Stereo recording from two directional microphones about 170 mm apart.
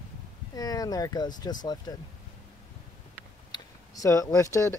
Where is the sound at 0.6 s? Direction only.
20° left (ahead or behind).